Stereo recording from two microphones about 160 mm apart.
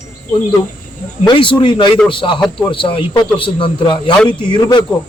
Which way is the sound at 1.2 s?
30° left (ahead or behind).